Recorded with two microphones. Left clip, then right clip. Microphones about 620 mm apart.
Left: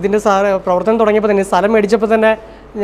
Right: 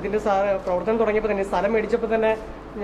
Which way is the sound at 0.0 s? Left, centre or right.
Left.